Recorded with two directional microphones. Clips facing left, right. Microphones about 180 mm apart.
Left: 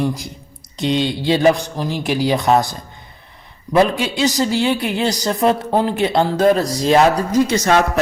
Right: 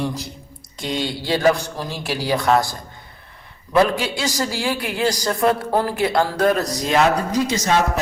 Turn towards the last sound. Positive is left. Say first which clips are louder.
# left 5 dB
turn(degrees=60)  # may be behind; listen again after turning